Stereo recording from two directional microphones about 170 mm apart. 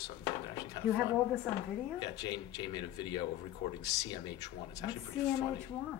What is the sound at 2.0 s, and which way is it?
Speech, 25° left (ahead or behind).